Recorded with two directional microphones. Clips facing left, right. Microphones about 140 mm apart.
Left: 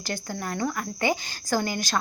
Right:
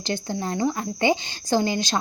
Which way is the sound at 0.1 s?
25° right (ahead or behind).